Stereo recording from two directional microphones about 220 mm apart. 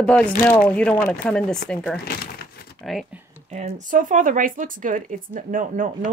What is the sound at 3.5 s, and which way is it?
Speech, 35° right (ahead or behind).